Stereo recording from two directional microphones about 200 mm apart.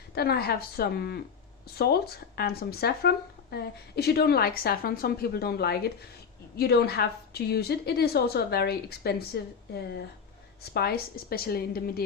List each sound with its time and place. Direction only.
0.1 s speech: 50° left (ahead or behind)